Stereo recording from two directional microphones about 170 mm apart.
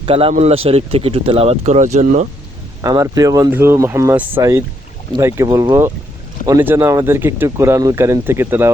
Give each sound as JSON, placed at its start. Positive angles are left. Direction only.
{"t": 0.0, "sound": "speech", "side_deg": -35}
{"t": 2.8, "sound": "speech", "side_deg": -20}